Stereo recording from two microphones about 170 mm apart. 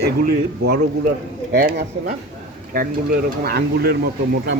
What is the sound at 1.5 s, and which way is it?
Speech, 60° right (ahead or behind).